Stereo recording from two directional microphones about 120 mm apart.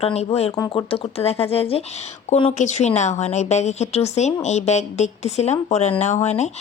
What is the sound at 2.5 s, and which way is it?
A woman's voice, 85° left.